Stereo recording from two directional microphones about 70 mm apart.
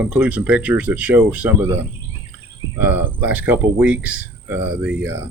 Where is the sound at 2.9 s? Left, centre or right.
Right.